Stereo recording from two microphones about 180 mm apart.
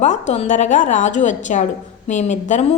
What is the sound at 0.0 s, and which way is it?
A woman's voice, 40° left (ahead or behind).